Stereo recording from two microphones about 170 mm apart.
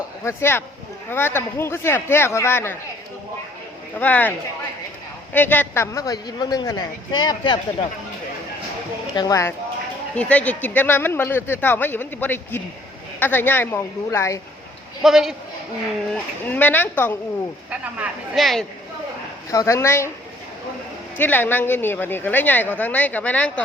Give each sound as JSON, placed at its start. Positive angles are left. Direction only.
{"t": 0.3, "sound": "speech", "side_deg": 15}
{"t": 4.0, "sound": "a man's voice", "side_deg": 10}
{"t": 9.1, "sound": "a man's voice", "side_deg": 20}
{"t": 15.0, "sound": "a man's voice", "side_deg": 0}
{"t": 16.1, "sound": "speech", "side_deg": 10}
{"t": 17.7, "sound": "speech", "side_deg": -10}
{"t": 19.5, "sound": "speech", "side_deg": 20}
{"t": 21.2, "sound": "speech", "side_deg": 10}